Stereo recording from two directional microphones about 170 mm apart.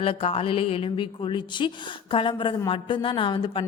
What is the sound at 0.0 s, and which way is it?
A woman's voice, 35° left (ahead or behind).